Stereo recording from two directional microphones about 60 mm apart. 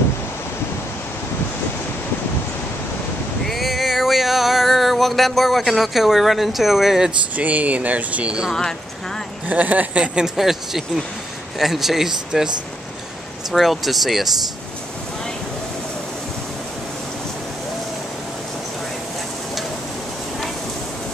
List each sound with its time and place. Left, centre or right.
3.4 s a sound: centre
7.3 s speech: right
9.5 s speech: right
10.1 s speech: centre
13.5 s speech: centre